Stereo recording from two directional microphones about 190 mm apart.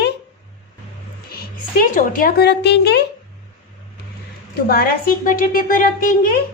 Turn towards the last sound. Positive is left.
turn(degrees=50)  # may be behind; listen again after turning